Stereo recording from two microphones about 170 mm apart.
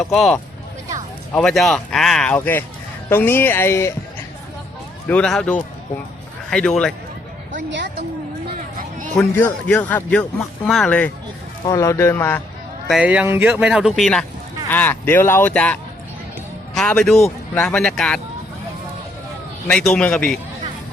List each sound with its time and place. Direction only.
0.0 s speech: 5° left (ahead or behind)
1.4 s a man's voice: centre (ahead or behind)
5.0 s a man's voice: 5° left (ahead or behind)
7.7 s a sound: 90° right
9.1 s a man's voice: 10° left (ahead or behind)
11.7 s a man's voice: 20° left (ahead or behind)
12.9 s a man's voice: 5° right (ahead or behind)
19.6 s speech: 5° left (ahead or behind)